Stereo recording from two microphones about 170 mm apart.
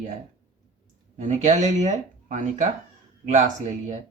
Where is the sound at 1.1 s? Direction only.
45° right (ahead or behind).